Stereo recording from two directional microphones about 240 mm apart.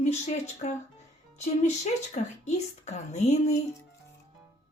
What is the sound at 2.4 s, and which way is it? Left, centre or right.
Speech, left.